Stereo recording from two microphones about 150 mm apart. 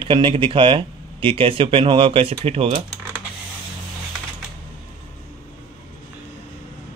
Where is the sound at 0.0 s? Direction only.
35° right (ahead or behind).